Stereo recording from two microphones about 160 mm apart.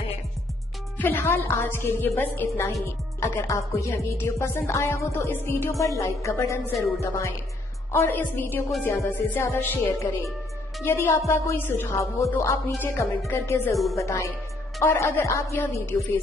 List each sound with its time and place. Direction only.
0.9 s a woman's voice: 10° left (ahead or behind)